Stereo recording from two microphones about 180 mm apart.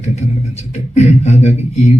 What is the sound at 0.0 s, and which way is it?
Speech, 40° left (ahead or behind).